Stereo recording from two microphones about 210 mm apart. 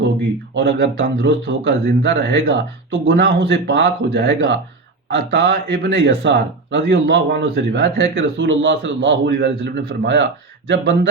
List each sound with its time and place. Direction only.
0.5 s speech: 55° right (ahead or behind)